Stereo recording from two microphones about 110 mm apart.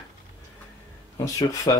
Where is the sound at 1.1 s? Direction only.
30° left (ahead or behind).